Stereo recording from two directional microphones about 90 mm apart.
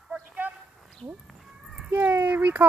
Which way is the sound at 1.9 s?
20° right (ahead or behind).